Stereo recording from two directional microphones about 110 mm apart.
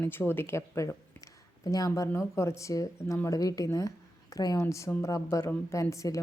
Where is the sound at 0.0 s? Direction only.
20° left (ahead or behind).